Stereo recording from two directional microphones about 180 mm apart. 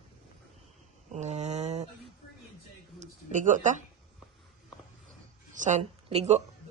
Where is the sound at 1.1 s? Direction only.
40° right (ahead or behind).